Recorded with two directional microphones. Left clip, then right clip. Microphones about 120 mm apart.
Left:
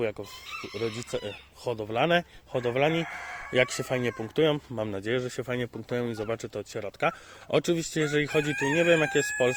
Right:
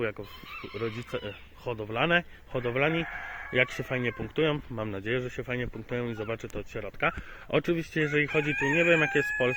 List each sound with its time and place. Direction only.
0.0 s speech: 25° left (ahead or behind)
3.5 s speech: 45° left (ahead or behind)
4.8 s speech: 35° left (ahead or behind)
6.7 s speech: 35° left (ahead or behind)
7.1 s speech: 20° left (ahead or behind)
7.7 s speech: 35° left (ahead or behind)